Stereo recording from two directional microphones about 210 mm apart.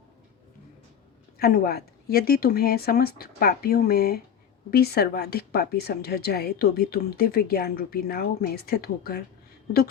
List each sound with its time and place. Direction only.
1.4 s a woman's voice: 45° left (ahead or behind)